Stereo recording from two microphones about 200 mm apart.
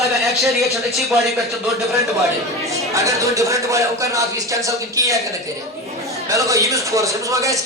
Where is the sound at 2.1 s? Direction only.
15° right (ahead or behind).